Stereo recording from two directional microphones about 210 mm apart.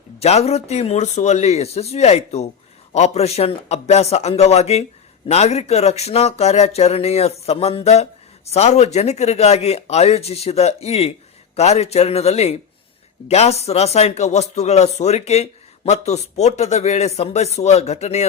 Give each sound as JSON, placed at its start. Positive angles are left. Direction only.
{"t": 0.2, "sound": "speech", "side_deg": 30}